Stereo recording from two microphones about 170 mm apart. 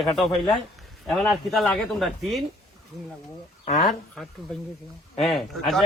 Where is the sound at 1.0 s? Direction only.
Centre (ahead or behind).